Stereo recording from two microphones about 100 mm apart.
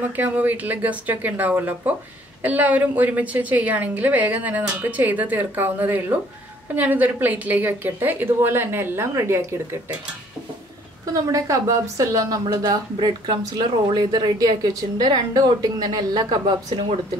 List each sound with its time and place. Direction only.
0.0 s a woman's voice: 20° right (ahead or behind)
11.3 s speech: 35° right (ahead or behind); by 17.0 s 50° right (ahead or behind)